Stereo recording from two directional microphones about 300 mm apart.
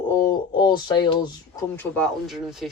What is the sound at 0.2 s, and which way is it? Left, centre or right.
Speech, centre.